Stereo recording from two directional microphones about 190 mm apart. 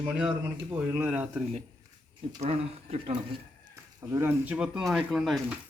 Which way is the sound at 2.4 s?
30° right (ahead or behind).